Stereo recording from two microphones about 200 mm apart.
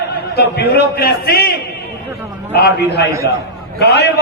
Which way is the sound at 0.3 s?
55° left (ahead or behind).